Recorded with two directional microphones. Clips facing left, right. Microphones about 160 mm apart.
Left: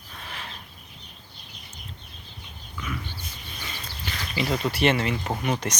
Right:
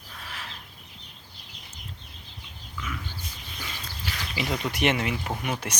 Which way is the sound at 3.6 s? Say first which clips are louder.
Left 1 dB; 5° right (ahead or behind).